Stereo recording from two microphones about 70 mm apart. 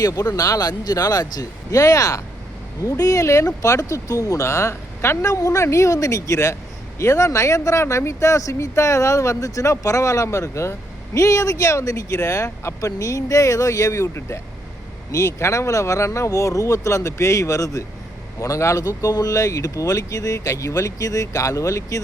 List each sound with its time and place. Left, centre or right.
0.0 s speech: left